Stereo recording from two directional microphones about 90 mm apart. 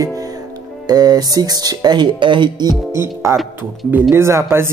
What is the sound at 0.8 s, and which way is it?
Speech, 45° right (ahead or behind).